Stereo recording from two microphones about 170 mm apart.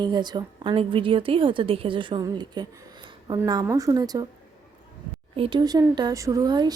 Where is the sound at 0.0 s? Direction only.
25° right (ahead or behind).